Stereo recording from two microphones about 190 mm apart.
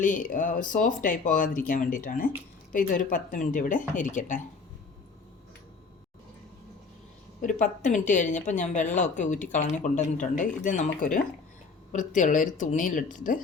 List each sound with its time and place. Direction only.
0.0 s speech: 45° left (ahead or behind)
7.4 s speech: 40° left (ahead or behind)
11.9 s speech: 40° left (ahead or behind)